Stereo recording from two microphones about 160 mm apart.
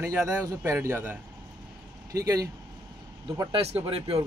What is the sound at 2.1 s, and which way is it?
Speech, 20° right (ahead or behind).